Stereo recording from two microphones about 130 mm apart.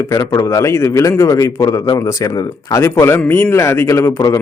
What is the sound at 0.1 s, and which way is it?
Speech, 25° left (ahead or behind).